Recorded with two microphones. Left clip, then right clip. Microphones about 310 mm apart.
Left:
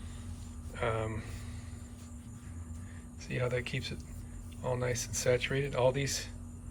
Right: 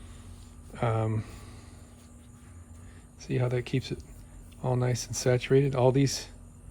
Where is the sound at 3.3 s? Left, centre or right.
Centre.